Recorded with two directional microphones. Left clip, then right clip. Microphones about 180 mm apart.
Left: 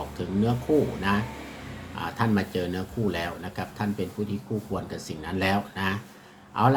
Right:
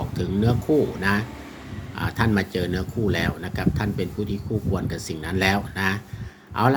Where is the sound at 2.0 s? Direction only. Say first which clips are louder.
Right 3 dB; 45° right (ahead or behind).